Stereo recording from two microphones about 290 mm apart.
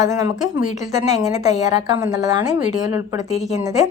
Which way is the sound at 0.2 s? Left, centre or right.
Centre.